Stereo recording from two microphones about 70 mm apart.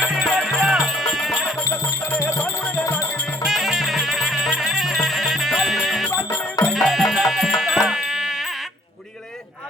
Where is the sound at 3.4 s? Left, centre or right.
Centre.